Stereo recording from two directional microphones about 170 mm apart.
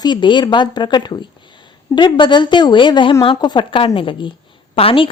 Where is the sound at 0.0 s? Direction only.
25° left (ahead or behind).